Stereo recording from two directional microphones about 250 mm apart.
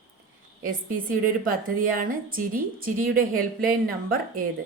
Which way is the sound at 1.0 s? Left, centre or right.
Right.